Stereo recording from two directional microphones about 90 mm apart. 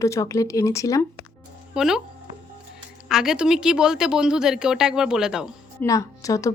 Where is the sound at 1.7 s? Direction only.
5° right (ahead or behind).